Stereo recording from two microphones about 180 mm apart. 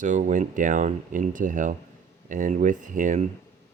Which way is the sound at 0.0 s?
45° right (ahead or behind).